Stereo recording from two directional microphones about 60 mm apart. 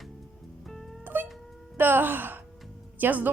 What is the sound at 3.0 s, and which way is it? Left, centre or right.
Speech, right.